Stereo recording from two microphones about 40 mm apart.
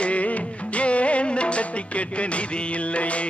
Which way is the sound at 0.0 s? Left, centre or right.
Left.